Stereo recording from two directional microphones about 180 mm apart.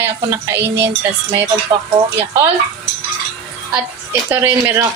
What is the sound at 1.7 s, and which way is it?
Speech, 15° right (ahead or behind).